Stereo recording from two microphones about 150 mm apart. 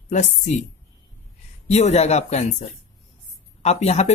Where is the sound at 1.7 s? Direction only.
50° left (ahead or behind).